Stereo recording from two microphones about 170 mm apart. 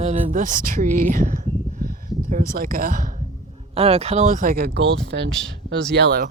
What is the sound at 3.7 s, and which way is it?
Speech, 35° right (ahead or behind).